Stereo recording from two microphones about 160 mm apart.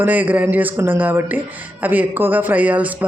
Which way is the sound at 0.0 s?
10° right (ahead or behind).